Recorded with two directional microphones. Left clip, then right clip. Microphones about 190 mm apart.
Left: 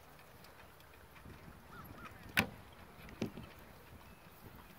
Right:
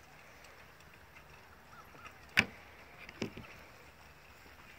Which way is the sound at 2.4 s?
55° left (ahead or behind).